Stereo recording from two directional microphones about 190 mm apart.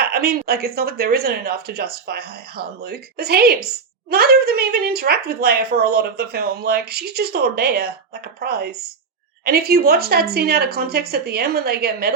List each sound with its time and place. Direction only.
0.0 s speech: 55° right (ahead or behind)